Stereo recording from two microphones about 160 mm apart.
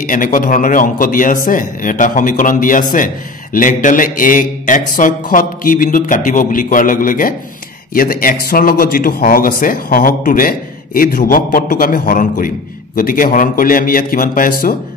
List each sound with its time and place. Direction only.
0.0 s a man's voice: 55° left (ahead or behind)